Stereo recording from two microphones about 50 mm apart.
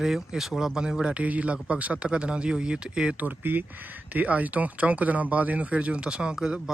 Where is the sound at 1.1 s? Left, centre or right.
Right.